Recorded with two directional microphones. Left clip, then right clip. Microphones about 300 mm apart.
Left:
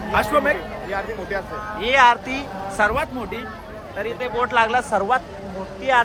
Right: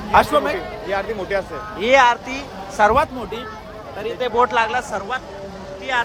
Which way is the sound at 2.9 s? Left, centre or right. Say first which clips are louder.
Right 6 dB; centre.